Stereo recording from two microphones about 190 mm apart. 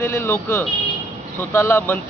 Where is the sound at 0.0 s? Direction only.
15° left (ahead or behind).